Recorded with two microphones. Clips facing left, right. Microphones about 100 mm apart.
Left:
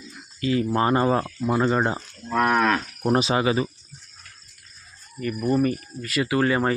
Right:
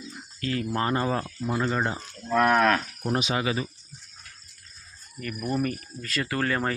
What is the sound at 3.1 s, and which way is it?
Speech, 35° left (ahead or behind).